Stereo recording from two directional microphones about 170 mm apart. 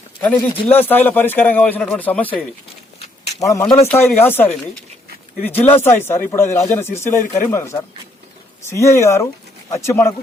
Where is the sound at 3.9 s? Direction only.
10° left (ahead or behind).